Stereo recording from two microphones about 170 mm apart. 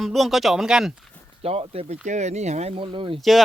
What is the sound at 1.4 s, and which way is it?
Speech, 35° right (ahead or behind).